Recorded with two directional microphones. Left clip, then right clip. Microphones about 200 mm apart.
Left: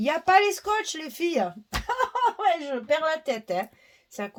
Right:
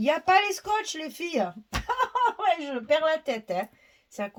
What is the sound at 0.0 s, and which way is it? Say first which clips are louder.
Speech: left 2 dB; 40° left (ahead or behind).